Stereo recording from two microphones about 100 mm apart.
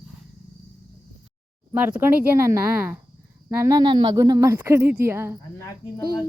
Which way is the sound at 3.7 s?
45° right (ahead or behind).